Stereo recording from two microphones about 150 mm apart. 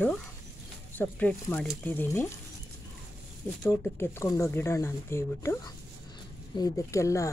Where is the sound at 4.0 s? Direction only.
20° left (ahead or behind).